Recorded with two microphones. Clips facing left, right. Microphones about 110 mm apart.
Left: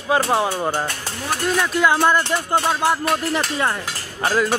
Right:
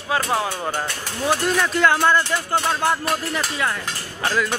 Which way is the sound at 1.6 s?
5° left (ahead or behind).